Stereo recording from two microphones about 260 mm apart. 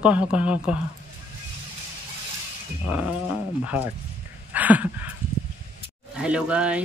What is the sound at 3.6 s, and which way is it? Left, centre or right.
Speech, centre.